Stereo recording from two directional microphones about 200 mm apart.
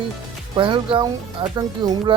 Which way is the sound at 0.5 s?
25° right (ahead or behind).